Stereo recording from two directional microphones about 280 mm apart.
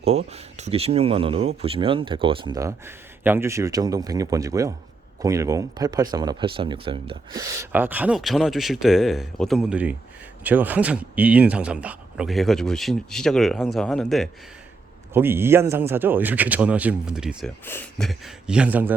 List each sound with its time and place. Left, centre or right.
0.0 s a man's voice: right; by 18.9 s centre